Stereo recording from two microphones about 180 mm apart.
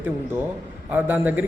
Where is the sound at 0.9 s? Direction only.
10° right (ahead or behind).